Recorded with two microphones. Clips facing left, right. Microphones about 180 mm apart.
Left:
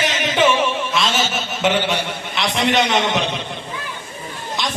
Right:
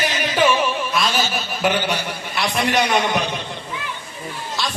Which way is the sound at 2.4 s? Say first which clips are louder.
Left 1 dB; 20° left (ahead or behind).